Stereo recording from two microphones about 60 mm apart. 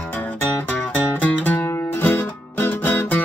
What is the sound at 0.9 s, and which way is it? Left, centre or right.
Music, left.